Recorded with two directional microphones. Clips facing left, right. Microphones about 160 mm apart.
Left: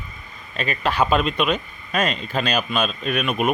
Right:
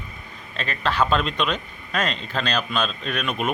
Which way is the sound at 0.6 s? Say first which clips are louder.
Left 2 dB; 10° left (ahead or behind).